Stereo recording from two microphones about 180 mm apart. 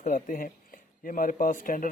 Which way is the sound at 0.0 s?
45° left (ahead or behind).